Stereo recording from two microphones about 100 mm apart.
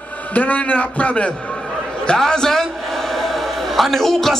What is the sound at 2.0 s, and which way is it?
A man's voice, 5° left (ahead or behind).